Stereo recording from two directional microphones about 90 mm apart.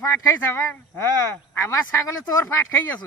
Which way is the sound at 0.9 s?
25° left (ahead or behind).